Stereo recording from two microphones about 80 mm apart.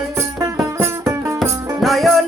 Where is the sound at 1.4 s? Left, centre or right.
Centre.